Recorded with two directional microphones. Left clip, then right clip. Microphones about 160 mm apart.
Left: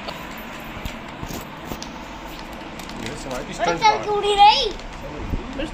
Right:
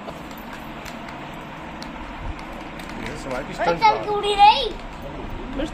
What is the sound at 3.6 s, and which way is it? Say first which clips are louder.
A child's voice: even; 5° left (ahead or behind).